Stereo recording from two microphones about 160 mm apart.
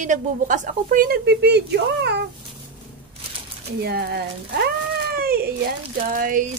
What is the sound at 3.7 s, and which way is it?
Speech, 85° right.